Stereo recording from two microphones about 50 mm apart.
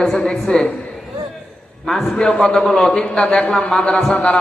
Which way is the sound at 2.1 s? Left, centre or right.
Centre.